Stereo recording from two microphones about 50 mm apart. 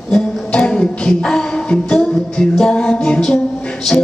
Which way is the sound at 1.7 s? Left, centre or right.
Centre.